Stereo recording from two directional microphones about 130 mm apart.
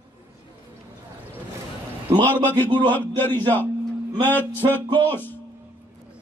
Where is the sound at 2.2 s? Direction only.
15° left (ahead or behind).